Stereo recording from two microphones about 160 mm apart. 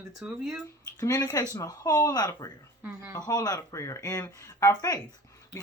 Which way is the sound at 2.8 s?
10° right (ahead or behind).